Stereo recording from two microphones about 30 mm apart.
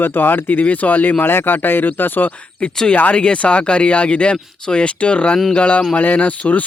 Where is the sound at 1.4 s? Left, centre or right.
Left.